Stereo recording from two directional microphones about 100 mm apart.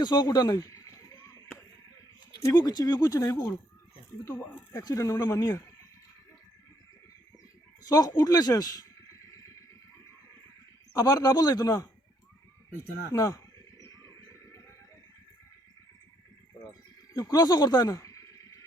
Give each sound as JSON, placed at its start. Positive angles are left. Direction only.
{"t": 0.0, "sound": "a man's voice", "side_deg": 45}
{"t": 1.1, "sound": "chop", "side_deg": 35}
{"t": 2.6, "sound": "a man's voice", "side_deg": 40}
{"t": 4.8, "sound": "a man's voice", "side_deg": 35}
{"t": 7.8, "sound": "a sound", "side_deg": 40}
{"t": 10.9, "sound": "a man's voice", "side_deg": 40}
{"t": 13.1, "sound": "a sound", "side_deg": 35}
{"t": 17.2, "sound": "speech", "side_deg": 40}